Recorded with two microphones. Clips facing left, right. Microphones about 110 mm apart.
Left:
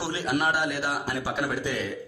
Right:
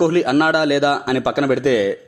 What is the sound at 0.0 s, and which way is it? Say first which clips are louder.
A man's voice: right 12 dB; 70° right (ahead or behind).